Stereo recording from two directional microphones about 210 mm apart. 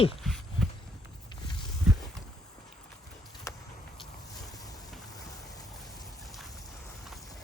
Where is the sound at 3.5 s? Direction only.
15° left (ahead or behind).